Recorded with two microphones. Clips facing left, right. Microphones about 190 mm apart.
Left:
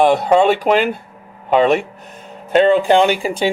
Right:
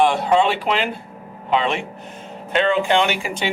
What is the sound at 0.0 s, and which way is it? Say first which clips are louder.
Speech: left 4 dB; 40° left (ahead or behind).